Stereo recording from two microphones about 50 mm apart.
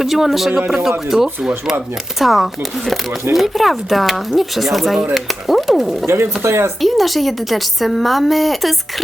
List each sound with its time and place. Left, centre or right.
0.0 s a woman's voice: centre
6.4 s speech: right
6.8 s a woman's voice: centre